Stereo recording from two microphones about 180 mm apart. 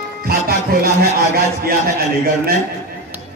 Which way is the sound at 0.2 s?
60° right (ahead or behind).